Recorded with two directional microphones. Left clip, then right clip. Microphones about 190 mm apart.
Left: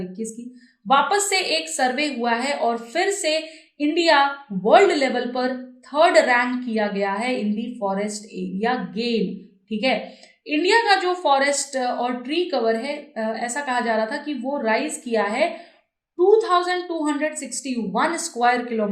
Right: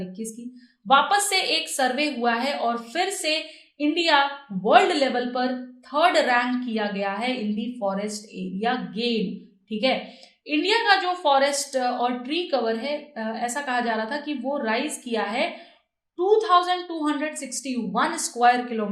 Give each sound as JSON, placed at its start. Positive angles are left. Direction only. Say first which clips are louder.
{"t": 0.2, "sound": "a woman's voice", "louder": "left 4 dB", "side_deg": -25}